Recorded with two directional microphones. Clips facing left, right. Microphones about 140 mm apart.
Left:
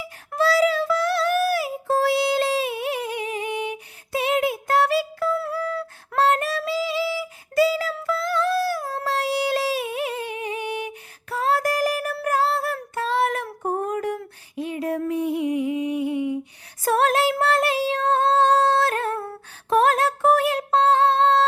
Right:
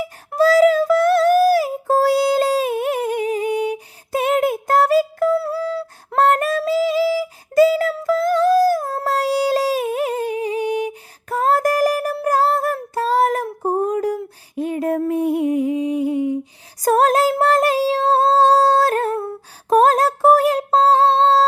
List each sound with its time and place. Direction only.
0.3 s child singing: 45° right (ahead or behind)
5.5 s humming: 30° right (ahead or behind)
6.1 s a sound: 50° right (ahead or behind)
6.6 s music: 45° right (ahead or behind)
9.0 s humming: 40° right (ahead or behind)
12.1 s music: 35° right (ahead or behind)
12.7 s child singing: 35° right (ahead or behind)
14.5 s music: 45° right (ahead or behind)
16.8 s female singing: 40° right (ahead or behind)
19.7 s a sound: 40° right (ahead or behind)